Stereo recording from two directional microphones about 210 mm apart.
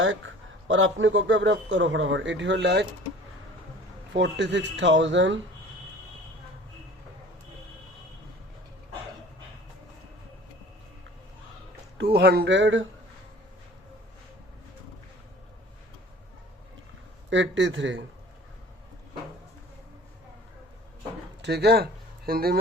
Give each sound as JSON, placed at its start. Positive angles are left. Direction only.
{"t": 0.0, "sound": "speech", "side_deg": -65}
{"t": 4.1, "sound": "speech", "side_deg": -55}
{"t": 11.9, "sound": "speech", "side_deg": -50}
{"t": 17.2, "sound": "speech", "side_deg": -60}
{"t": 21.4, "sound": "speech", "side_deg": -50}